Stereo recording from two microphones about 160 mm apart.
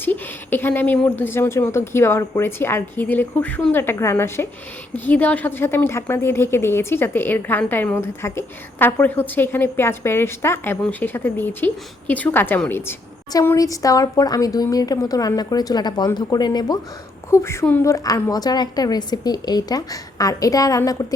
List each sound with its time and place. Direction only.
0.0 s a woman's voice: 10° left (ahead or behind)